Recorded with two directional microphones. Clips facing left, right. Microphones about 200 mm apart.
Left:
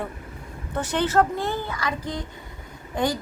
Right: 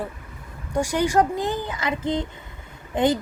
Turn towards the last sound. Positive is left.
turn(degrees=-20)  # may be behind; listen again after turning